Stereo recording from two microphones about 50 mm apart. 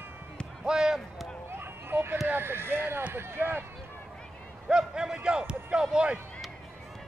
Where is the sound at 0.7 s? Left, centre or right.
Centre.